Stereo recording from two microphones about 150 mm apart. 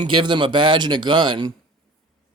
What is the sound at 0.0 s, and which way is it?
Speech, 30° right (ahead or behind).